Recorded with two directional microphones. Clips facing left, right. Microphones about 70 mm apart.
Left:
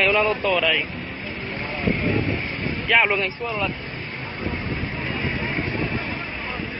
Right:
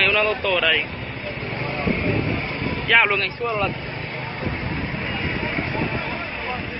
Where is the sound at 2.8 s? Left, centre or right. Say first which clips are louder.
Right 2 dB; centre.